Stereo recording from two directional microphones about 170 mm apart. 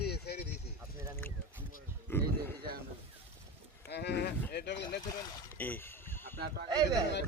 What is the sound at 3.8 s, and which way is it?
Speech, 80° left.